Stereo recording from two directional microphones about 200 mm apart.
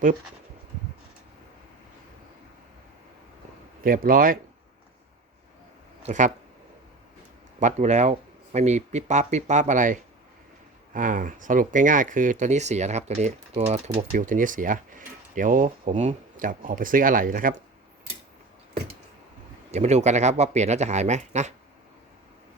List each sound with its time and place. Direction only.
3.8 s speech: 45° right (ahead or behind)
6.0 s speech: 35° right (ahead or behind)
7.6 s speech: 35° right (ahead or behind)
19.7 s speech: 35° right (ahead or behind)